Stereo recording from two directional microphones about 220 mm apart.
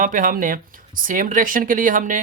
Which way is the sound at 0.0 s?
35° right (ahead or behind).